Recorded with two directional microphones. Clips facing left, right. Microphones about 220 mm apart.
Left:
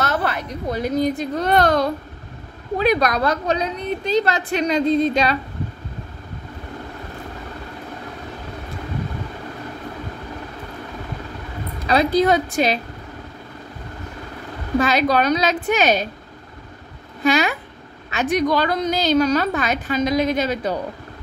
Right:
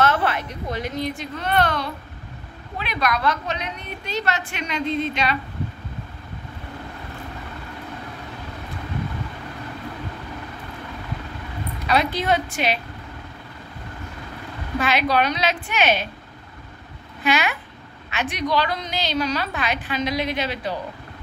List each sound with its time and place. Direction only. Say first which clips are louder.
0.0 s a woman's voice: right 2 dB; 40° left (ahead or behind)
11.8 s a woman's voice: left 6 dB; 40° left (ahead or behind)
14.8 s a woman's voice: left 3 dB; 40° left (ahead or behind)
17.2 s a woman's voice: left 4 dB; 40° left (ahead or behind)